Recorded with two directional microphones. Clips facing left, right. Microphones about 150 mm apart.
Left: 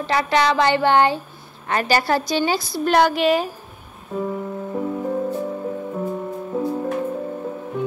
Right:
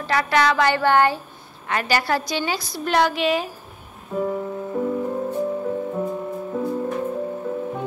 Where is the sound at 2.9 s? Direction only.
45° left (ahead or behind).